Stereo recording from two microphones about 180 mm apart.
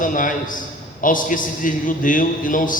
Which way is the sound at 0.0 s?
50° left (ahead or behind).